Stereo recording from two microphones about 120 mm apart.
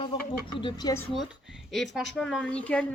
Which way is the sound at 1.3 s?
5° right (ahead or behind).